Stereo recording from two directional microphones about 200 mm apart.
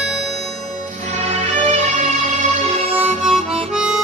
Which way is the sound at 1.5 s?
35° right (ahead or behind).